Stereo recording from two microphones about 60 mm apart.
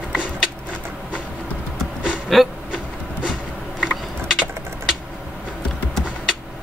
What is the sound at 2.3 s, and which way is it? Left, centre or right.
Vehicle, centre.